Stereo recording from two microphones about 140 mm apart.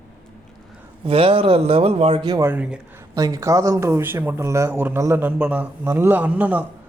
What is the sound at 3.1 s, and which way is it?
Speech, 25° right (ahead or behind).